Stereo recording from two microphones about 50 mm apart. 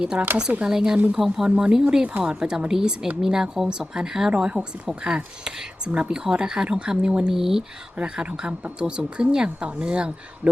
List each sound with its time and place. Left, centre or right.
0.2 s speech: right
0.6 s speech: centre
1.5 s speech: centre
7.3 s speech: centre
8.0 s speech: centre